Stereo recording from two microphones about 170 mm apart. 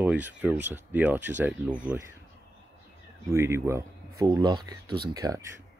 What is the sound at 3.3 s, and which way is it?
Speech, 15° right (ahead or behind).